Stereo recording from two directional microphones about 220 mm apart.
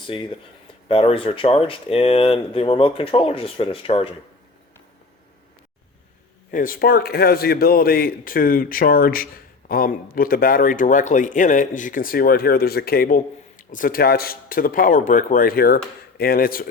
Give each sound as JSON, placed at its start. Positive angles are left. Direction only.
{"t": 0.0, "sound": "speech", "side_deg": 20}
{"t": 6.5, "sound": "a man's voice", "side_deg": 40}